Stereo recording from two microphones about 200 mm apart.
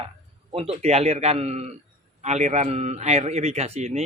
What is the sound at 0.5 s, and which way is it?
A man's voice, 30° right (ahead or behind).